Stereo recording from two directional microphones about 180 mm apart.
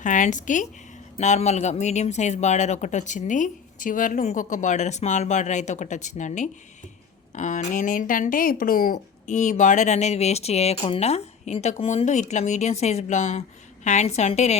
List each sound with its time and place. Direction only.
0.0 s a woman's voice: 45° left (ahead or behind)